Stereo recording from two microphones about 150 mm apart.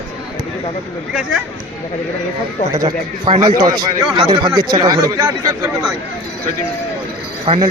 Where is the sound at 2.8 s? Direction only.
30° right (ahead or behind).